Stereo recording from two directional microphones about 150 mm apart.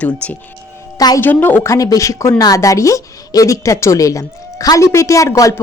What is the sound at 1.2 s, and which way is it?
Speech, 10° left (ahead or behind).